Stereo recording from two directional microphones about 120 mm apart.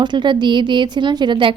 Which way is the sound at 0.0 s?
40° right (ahead or behind).